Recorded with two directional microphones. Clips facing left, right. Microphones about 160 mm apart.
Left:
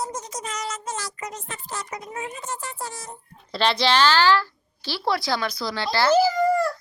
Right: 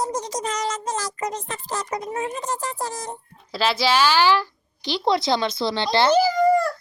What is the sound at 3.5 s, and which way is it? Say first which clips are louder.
A woman's voice: even; 5° right (ahead or behind).